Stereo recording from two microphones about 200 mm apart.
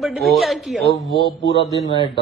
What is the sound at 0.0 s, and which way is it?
Speech, centre (ahead or behind).